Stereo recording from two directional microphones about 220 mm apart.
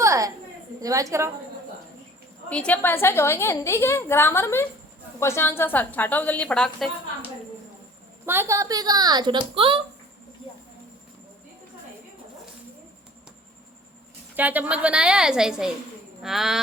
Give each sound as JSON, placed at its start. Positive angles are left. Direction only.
{"t": 0.0, "sound": "a sound", "side_deg": -15}
{"t": 0.8, "sound": "a woman's voice", "side_deg": -15}
{"t": 2.5, "sound": "a woman's voice", "side_deg": 5}
{"t": 8.3, "sound": "a woman's voice", "side_deg": -10}
{"t": 14.3, "sound": "a woman's voice", "side_deg": -10}